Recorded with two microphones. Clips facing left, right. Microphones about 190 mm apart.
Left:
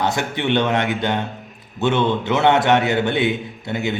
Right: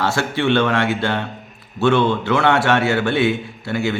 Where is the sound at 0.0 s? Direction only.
20° left (ahead or behind).